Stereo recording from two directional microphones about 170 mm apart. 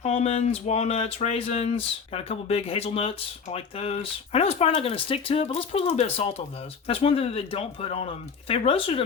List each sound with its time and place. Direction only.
0.0 s speech: 40° left (ahead or behind)